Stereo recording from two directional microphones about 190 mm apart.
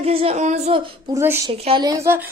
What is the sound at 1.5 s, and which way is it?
Speech, 30° right (ahead or behind).